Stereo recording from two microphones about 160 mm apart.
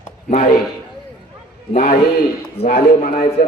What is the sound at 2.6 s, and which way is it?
Speech, 90° left.